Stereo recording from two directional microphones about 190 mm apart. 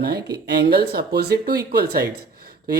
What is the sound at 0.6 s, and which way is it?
Speech, 60° right (ahead or behind).